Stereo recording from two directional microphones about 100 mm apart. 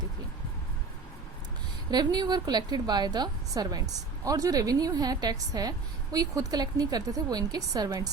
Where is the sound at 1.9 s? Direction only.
45° right (ahead or behind).